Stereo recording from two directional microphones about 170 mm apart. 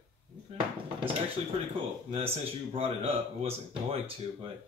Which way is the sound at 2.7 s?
35° right (ahead or behind).